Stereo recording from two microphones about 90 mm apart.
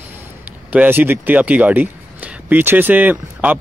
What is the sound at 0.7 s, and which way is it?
Speech, 20° right (ahead or behind).